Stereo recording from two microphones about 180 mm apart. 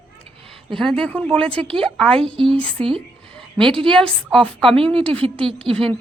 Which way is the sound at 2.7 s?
30° right (ahead or behind).